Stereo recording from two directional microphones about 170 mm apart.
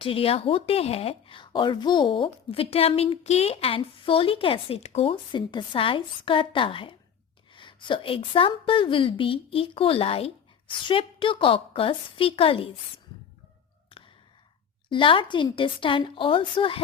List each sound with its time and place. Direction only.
0.0 s speech: 35° left (ahead or behind)
13.9 s sigh: 30° left (ahead or behind)
14.8 s a woman's voice: 30° left (ahead or behind)